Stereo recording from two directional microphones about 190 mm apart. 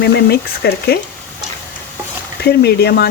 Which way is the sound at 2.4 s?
60° left (ahead or behind).